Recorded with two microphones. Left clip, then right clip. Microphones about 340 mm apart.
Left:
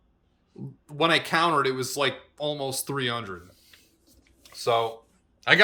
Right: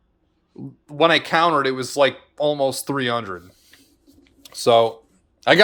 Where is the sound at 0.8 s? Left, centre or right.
Centre.